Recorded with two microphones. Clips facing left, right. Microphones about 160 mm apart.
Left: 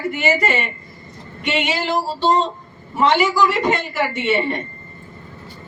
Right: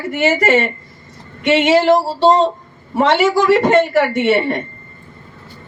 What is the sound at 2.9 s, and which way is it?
A woman's voice, 80° right.